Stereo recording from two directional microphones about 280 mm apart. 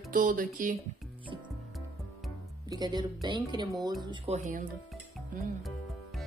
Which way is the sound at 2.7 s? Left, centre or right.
Centre.